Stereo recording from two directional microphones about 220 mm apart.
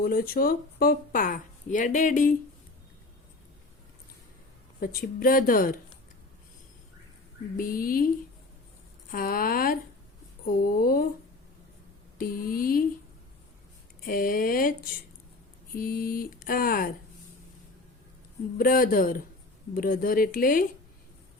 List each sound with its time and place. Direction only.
0.0 s speech: 40° left (ahead or behind)
4.8 s speech: 40° left (ahead or behind)
7.5 s speech: 40° left (ahead or behind)
12.1 s speech: 40° left (ahead or behind)
14.0 s speech: 40° left (ahead or behind)
18.5 s speech: 40° left (ahead or behind)